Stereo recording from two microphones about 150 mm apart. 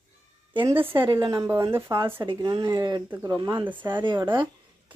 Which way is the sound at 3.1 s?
15° right (ahead or behind).